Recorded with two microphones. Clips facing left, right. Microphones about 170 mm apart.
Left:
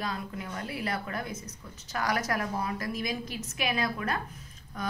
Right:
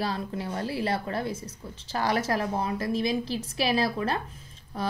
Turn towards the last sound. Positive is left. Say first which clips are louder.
# right 4 dB
turn(degrees=-30)  # may be behind; listen again after turning